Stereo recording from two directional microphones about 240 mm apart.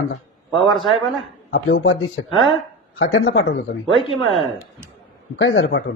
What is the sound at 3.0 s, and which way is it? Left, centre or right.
Speech, left.